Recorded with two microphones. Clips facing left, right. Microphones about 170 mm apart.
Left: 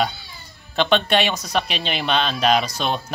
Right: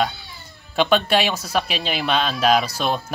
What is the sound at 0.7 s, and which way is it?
Speech, 5° right (ahead or behind).